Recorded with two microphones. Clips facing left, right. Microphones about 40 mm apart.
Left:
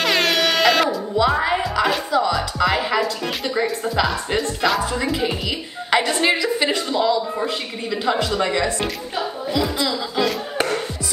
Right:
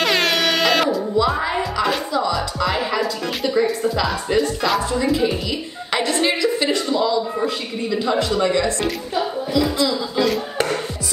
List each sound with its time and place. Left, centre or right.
0.0 s music: centre
1.9 s speech: centre
5.2 s speech: centre